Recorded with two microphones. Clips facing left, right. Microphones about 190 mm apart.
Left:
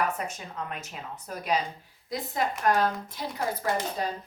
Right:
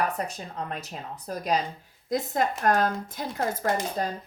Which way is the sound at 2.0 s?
45° right (ahead or behind).